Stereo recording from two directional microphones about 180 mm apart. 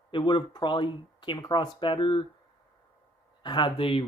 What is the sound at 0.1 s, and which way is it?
Speech, 25° left (ahead or behind).